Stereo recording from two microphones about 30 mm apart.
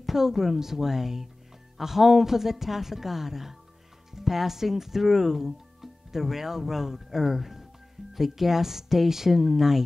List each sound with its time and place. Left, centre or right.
0.1 s speech: centre